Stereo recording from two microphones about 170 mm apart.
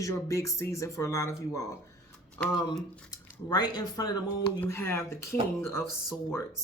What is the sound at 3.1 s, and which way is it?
Speech, 25° left (ahead or behind).